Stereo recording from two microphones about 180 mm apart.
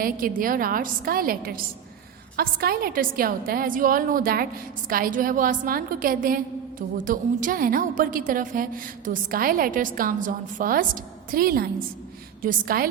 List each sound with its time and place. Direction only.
0.0 s a woman's voice: 50° right (ahead or behind)